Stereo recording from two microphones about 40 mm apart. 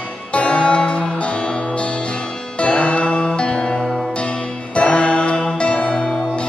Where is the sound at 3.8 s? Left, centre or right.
Centre.